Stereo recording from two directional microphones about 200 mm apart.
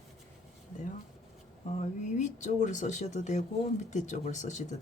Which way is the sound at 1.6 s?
35° left (ahead or behind).